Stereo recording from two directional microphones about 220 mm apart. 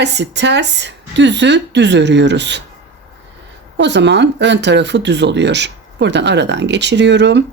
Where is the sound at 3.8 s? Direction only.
50° right (ahead or behind).